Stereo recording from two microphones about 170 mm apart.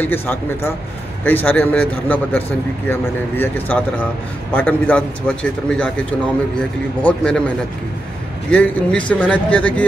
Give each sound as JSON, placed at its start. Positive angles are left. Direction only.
{"t": 0.0, "sound": "a man's voice", "side_deg": 15}
{"t": 7.0, "sound": "a man's voice", "side_deg": 5}
{"t": 8.5, "sound": "a man's voice", "side_deg": 10}